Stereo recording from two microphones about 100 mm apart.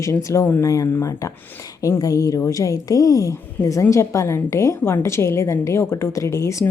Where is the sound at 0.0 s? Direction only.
30° left (ahead or behind).